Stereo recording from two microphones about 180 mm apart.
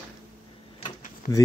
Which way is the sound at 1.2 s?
55° left (ahead or behind).